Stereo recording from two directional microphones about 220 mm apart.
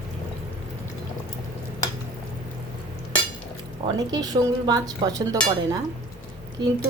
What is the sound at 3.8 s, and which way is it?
Speech, 15° right (ahead or behind).